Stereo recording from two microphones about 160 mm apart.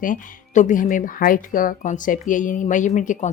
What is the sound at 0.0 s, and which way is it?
Speech, 55° left (ahead or behind).